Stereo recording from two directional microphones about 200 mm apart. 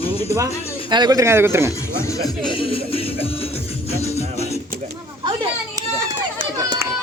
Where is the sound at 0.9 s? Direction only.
20° right (ahead or behind).